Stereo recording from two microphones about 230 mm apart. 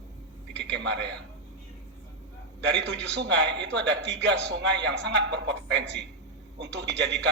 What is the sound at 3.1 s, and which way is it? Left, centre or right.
A man's voice, right.